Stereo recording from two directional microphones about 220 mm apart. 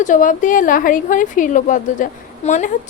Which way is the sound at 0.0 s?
35° left (ahead or behind).